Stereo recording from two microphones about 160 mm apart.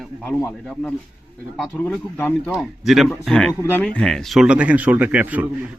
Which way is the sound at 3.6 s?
15° left (ahead or behind).